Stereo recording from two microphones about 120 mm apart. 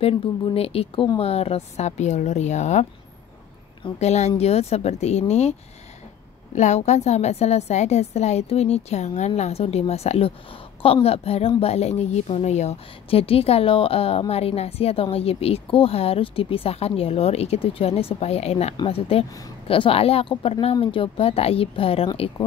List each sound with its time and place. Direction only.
0.0 s a woman's voice: 50° left (ahead or behind); by 2.9 s 70° left (ahead or behind)
4.0 s a woman's voice: 70° left (ahead or behind); by 22.3 s 55° left (ahead or behind)